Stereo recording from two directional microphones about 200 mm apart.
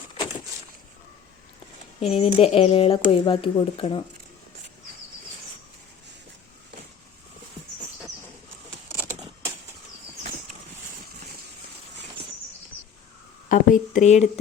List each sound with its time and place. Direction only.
2.0 s speech: 30° left (ahead or behind)
13.5 s speech: 40° left (ahead or behind)